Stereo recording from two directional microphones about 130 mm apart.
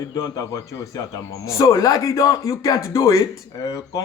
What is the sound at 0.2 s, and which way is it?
A man's voice, 25° left (ahead or behind).